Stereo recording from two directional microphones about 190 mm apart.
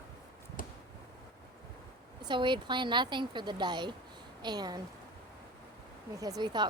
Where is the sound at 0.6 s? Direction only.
45° left (ahead or behind).